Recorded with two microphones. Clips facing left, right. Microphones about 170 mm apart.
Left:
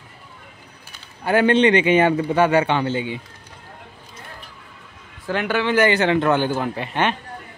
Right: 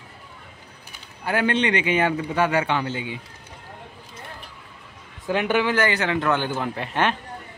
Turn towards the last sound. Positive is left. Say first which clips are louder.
# left 1 dB
turn(degrees=0)  # may be behind; listen again after turning